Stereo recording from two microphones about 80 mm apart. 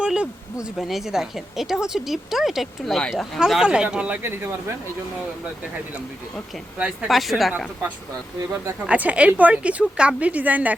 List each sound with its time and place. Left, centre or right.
0.0 s a woman's voice: centre
4.2 s speech: right
6.7 s a woman's voice: centre
7.1 s a woman's voice: centre
8.9 s a woman's voice: centre